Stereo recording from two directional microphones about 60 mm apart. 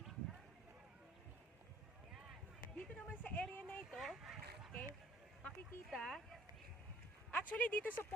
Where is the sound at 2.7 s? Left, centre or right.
Left.